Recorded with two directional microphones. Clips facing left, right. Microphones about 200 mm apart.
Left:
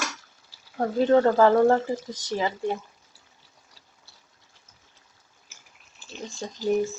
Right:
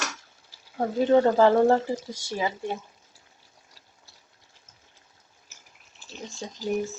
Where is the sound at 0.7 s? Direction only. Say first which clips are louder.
Left 1 dB; 10° right (ahead or behind); by 2.3 s 25° right (ahead or behind).